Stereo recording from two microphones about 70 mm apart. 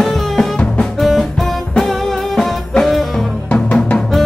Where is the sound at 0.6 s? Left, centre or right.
Centre.